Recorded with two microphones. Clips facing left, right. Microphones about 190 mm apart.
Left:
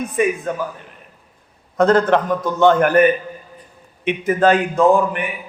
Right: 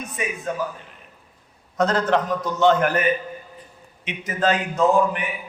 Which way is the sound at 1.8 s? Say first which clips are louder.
Left 6 dB; 55° left (ahead or behind).